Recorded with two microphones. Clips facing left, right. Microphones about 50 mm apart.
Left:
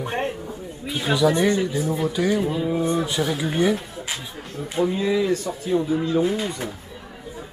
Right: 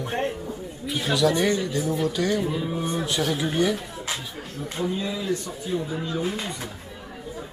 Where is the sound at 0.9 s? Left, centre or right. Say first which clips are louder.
Left 2 dB; centre.